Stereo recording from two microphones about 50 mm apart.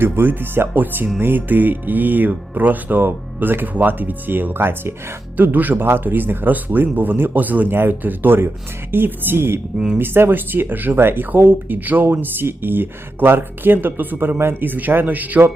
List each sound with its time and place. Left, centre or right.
0.0 s speech: right
5.4 s speech: right
7.7 s speech: right
9.7 s speech: centre
10.0 s speech: right